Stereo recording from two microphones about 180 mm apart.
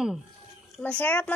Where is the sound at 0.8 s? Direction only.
10° left (ahead or behind).